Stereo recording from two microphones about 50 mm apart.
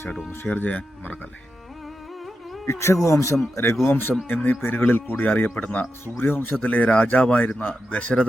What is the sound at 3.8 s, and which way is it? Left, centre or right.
A man's voice, left.